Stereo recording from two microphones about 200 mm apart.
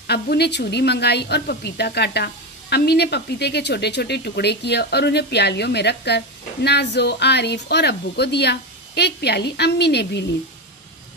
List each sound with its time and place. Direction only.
0.0 s a woman's voice: 55° left (ahead or behind)